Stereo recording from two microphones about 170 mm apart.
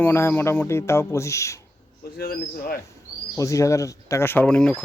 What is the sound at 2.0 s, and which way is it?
Speech, 60° left (ahead or behind).